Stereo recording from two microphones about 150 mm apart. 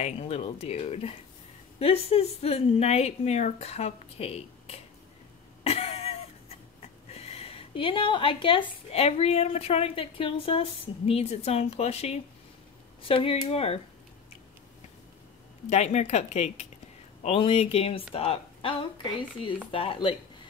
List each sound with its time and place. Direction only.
0.0 s a woman's voice: 45° left (ahead or behind)
5.6 s cough: 40° left (ahead or behind)
7.1 s a woman's voice: 45° left (ahead or behind)
15.7 s a woman's voice: 50° left (ahead or behind)